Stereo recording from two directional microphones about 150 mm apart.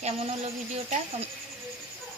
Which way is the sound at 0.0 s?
45° right (ahead or behind).